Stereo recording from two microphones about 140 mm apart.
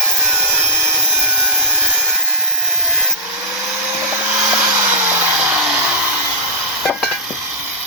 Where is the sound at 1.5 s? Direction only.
10° right (ahead or behind).